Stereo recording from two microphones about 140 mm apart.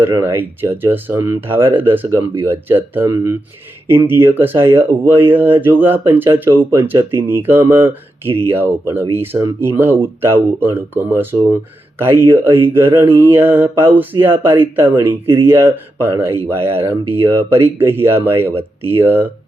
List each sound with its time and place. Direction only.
0.2 s speech: 15° right (ahead or behind)